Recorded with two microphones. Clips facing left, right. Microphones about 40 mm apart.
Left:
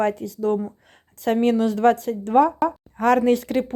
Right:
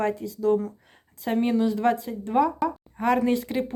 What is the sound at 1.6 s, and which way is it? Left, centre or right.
Speech, left.